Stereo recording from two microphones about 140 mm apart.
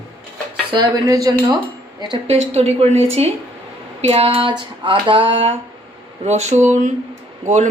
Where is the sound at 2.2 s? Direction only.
50° right (ahead or behind).